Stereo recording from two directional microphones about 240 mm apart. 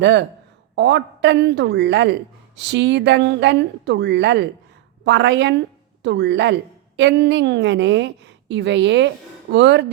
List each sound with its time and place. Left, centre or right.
0.0 s a woman's voice: right